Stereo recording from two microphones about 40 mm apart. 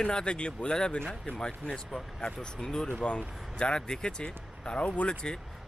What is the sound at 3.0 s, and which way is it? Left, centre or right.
Speech, left.